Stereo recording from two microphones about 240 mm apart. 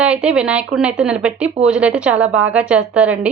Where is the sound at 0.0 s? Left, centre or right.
Centre.